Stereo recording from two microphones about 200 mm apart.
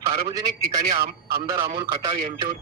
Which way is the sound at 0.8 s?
50° right (ahead or behind).